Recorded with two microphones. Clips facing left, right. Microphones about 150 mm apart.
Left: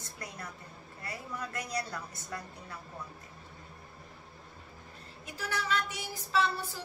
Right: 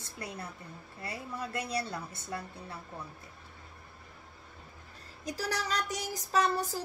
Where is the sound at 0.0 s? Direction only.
30° right (ahead or behind).